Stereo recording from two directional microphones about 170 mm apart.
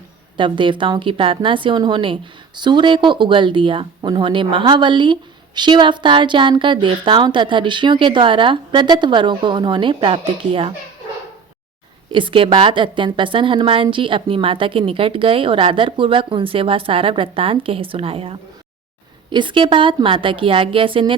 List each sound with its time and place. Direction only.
0.3 s speech: 30° right (ahead or behind)
12.1 s a woman's voice: 30° right (ahead or behind)